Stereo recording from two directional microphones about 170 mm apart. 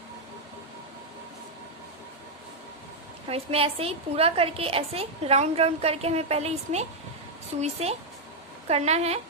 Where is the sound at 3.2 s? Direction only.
35° right (ahead or behind).